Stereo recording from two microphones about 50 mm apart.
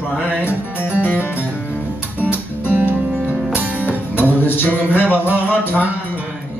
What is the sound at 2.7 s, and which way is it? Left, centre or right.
Music, right.